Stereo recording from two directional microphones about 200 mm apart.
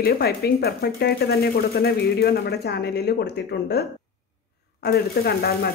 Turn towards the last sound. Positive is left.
turn(degrees=50)  # may be behind; listen again after turning